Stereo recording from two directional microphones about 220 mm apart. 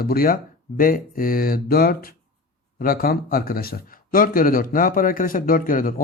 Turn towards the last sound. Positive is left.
turn(degrees=40)  # may be behind; listen again after turning